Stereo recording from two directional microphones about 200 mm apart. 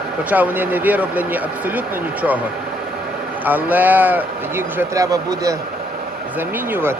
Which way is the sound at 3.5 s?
10° right (ahead or behind).